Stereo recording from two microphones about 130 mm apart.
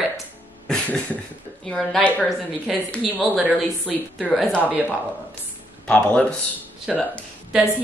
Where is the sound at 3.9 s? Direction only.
Centre (ahead or behind).